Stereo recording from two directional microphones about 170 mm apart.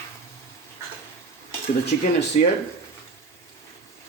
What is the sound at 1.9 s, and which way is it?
Speech, 50° left (ahead or behind).